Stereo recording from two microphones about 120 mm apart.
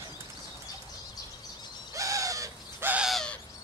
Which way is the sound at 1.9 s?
25° right (ahead or behind).